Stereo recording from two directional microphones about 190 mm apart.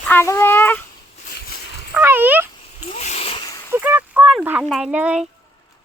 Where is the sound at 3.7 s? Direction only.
10° right (ahead or behind).